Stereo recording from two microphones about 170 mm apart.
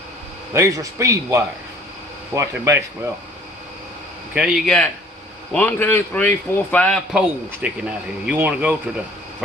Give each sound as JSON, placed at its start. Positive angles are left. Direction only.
{"t": 0.5, "sound": "speech", "side_deg": -15}
{"t": 4.4, "sound": "a man's voice", "side_deg": 0}
{"t": 7.1, "sound": "speech", "side_deg": -5}